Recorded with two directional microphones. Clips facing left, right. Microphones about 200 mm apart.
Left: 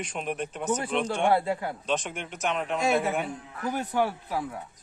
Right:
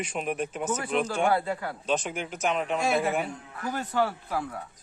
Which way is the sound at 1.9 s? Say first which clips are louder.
Right 3 dB; centre (ahead or behind).